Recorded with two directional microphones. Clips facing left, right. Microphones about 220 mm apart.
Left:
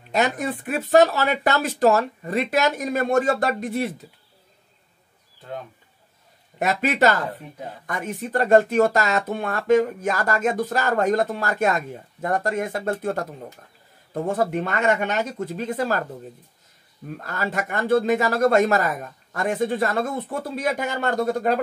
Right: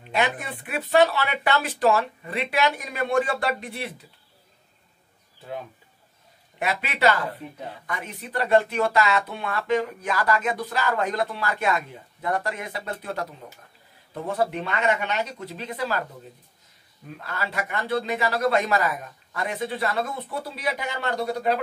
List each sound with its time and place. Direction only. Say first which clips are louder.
0.1 s speech: left 4 dB; 40° left (ahead or behind)
5.4 s speech: even; 5° right (ahead or behind)
6.6 s speech: left 4 dB; 45° left (ahead or behind)
17.1 s speech: left 4 dB; 45° left (ahead or behind)